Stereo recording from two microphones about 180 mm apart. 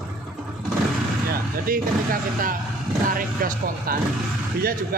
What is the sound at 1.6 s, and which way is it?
A man's voice, 55° right (ahead or behind).